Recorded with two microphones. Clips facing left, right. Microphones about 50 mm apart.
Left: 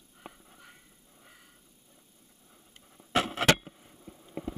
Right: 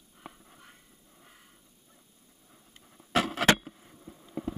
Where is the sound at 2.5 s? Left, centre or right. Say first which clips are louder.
Right 1 dB; centre.